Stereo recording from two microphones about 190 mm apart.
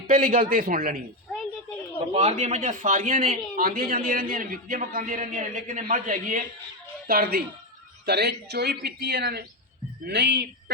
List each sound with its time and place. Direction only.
0.1 s a man's voice: 45° right (ahead or behind)
2.1 s a man's voice: 35° right (ahead or behind); by 10.4 s 65° right (ahead or behind)